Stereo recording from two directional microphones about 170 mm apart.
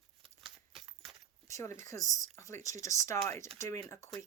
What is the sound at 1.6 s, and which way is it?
A woman's voice, 15° left (ahead or behind).